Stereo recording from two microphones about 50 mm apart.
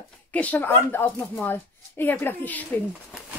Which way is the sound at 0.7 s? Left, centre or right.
Left.